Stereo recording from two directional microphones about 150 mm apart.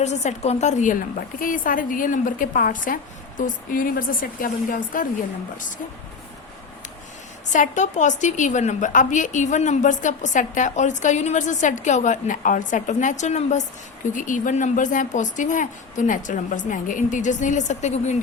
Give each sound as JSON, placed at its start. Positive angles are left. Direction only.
{"t": 0.0, "sound": "a woman's voice", "side_deg": 50}
{"t": 7.5, "sound": "a woman's voice", "side_deg": 55}